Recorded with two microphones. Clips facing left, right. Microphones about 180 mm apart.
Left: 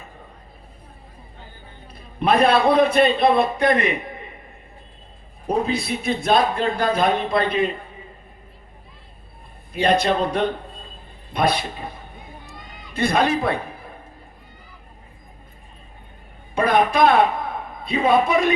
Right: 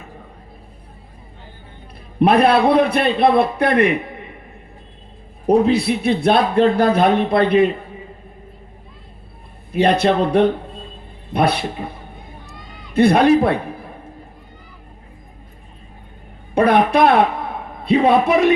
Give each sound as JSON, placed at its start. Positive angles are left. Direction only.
{"t": 2.2, "sound": "a man's voice", "side_deg": -65}
{"t": 5.5, "sound": "a man's voice", "side_deg": -65}
{"t": 9.7, "sound": "a man's voice", "side_deg": -65}
{"t": 12.5, "sound": "a sound", "side_deg": -65}
{"t": 16.6, "sound": "a man's voice", "side_deg": -65}